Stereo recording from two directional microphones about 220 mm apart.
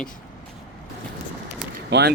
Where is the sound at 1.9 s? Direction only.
50° right (ahead or behind).